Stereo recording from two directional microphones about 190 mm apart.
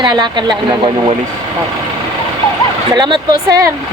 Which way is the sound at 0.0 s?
25° right (ahead or behind).